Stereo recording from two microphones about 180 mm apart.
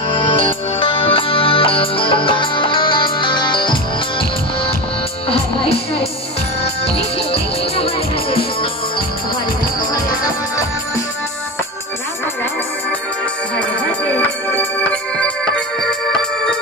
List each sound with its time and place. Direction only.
0.1 s music: 30° left (ahead or behind)
7.7 s music: 35° left (ahead or behind)
14.1 s music: 10° left (ahead or behind)